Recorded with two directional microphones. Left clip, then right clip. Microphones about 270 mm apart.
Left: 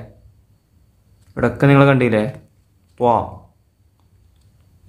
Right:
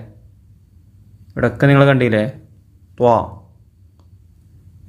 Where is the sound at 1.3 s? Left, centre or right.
Centre.